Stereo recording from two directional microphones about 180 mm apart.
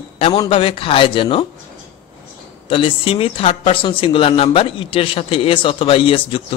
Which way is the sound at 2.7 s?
30° left (ahead or behind).